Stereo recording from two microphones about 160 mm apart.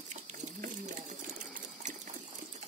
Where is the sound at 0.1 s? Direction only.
50° right (ahead or behind).